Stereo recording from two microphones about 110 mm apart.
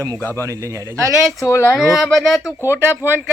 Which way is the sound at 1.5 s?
25° left (ahead or behind).